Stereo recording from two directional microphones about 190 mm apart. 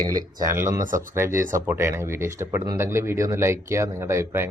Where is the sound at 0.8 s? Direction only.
45° right (ahead or behind).